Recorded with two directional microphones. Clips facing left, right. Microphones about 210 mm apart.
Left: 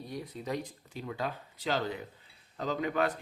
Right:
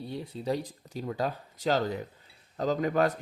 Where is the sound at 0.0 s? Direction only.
30° right (ahead or behind).